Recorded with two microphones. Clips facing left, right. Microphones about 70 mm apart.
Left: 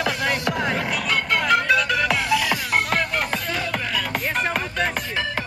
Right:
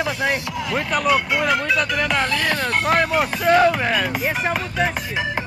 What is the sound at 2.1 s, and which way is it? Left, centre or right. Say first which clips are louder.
Music: right 1 dB; right.